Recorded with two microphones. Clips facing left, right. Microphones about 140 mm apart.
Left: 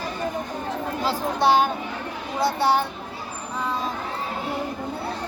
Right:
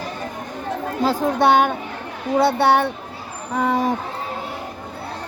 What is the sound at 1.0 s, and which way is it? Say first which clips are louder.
Speech: right 5 dB; 55° right (ahead or behind).